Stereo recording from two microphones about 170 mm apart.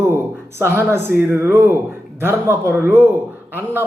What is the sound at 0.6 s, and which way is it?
A man's voice, 15° right (ahead or behind).